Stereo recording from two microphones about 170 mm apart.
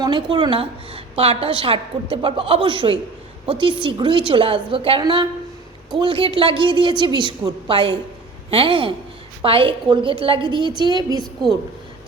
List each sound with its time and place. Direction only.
0.0 s a woman's voice: 25° right (ahead or behind)